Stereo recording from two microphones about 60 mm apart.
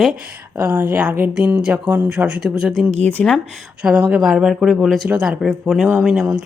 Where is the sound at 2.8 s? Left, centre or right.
Centre.